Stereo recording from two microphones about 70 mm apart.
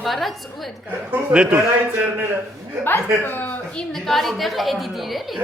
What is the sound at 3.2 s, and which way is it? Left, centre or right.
Speech, left.